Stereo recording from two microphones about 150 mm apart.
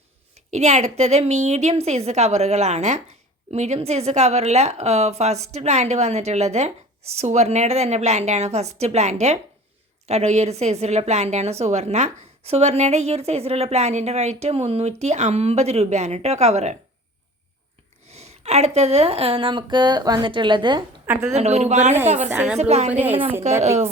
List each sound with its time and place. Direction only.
0.3 s a woman's voice: 50° right (ahead or behind)
18.1 s a woman's voice: 45° right (ahead or behind)
21.1 s a woman's voice: 15° right (ahead or behind)
21.3 s a woman's voice: 45° right (ahead or behind)
22.9 s a woman's voice: 10° right (ahead or behind)
23.6 s a woman's voice: 45° right (ahead or behind)